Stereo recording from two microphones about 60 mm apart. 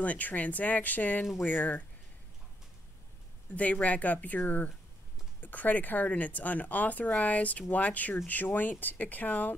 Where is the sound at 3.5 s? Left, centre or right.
Left.